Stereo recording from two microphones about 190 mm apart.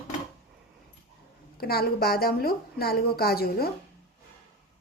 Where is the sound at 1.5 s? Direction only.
55° left (ahead or behind).